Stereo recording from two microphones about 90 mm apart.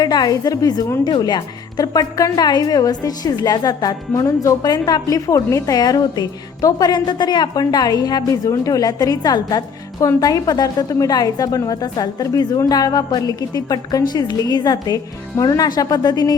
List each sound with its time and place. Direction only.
0.0 s a woman's voice: 50° left (ahead or behind)